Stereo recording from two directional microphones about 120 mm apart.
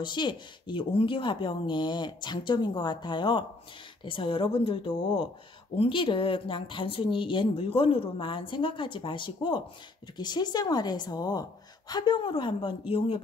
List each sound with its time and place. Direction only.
0.0 s speech: 40° left (ahead or behind)